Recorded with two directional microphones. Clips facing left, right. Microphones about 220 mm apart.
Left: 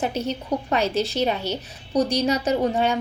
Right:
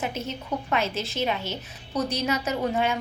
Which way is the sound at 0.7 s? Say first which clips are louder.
Left 5 dB; 35° left (ahead or behind).